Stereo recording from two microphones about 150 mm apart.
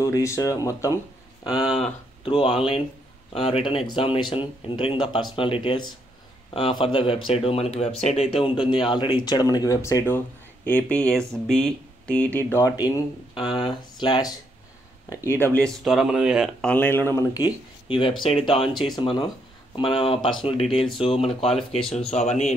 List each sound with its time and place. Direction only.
0.0 s speech: 20° left (ahead or behind)
1.8 s speech: 40° left (ahead or behind); by 12.7 s 15° left (ahead or behind)
13.3 s speech: 35° left (ahead or behind)
15.0 s speech: 15° left (ahead or behind)
15.8 s speech: centre (ahead or behind)
16.6 s speech: 10° left (ahead or behind)
17.8 s speech: 35° left (ahead or behind)